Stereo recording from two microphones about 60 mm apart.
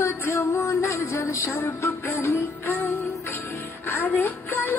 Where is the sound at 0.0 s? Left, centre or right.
Left.